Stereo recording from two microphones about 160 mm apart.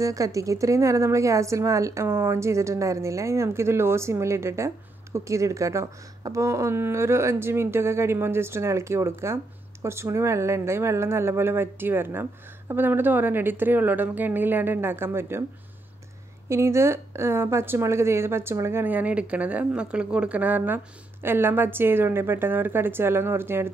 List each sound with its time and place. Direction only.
0.0 s a woman's voice: 20° right (ahead or behind)
16.4 s a woman's voice: 15° right (ahead or behind)